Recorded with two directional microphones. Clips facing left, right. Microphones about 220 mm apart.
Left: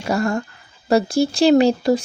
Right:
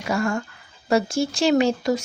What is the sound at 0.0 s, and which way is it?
A woman's voice, 35° left (ahead or behind).